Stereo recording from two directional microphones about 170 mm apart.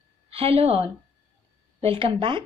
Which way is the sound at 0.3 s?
35° right (ahead or behind).